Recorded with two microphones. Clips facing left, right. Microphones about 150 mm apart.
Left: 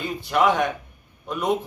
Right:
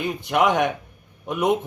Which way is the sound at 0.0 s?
20° right (ahead or behind).